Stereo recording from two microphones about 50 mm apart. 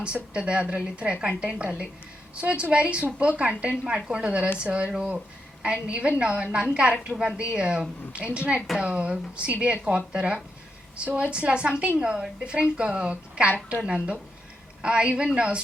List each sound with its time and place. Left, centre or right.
0.0 s a woman's voice: centre